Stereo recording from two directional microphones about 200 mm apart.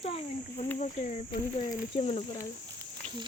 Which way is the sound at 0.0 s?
30° left (ahead or behind).